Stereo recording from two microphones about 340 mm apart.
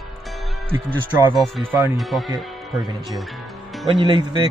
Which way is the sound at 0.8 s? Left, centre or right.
Centre.